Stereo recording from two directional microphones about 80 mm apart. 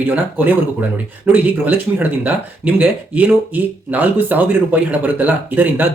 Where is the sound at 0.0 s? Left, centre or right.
Right.